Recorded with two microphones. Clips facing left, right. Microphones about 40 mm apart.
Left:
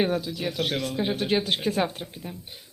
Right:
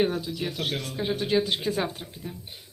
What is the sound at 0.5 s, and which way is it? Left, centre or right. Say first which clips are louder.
Speech: left 4 dB; left.